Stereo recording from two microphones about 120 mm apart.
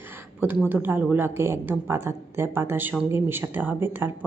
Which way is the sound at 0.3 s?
15° right (ahead or behind).